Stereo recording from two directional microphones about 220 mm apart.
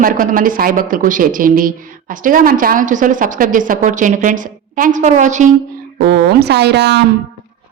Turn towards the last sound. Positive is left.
turn(degrees=-50)  # may be behind; listen again after turning